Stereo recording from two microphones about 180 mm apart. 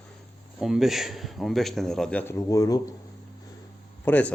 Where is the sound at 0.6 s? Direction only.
Centre (ahead or behind).